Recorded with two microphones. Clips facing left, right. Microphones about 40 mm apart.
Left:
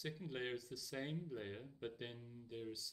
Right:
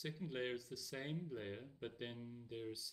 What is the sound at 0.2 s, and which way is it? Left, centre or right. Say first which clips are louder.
Speech: right 3 dB; centre.